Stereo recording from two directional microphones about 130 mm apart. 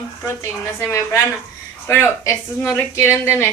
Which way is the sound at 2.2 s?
20° left (ahead or behind).